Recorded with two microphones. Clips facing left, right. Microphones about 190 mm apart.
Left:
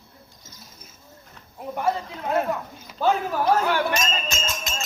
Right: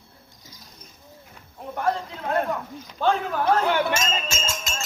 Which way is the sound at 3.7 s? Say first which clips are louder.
Right 1 dB; 20° right (ahead or behind).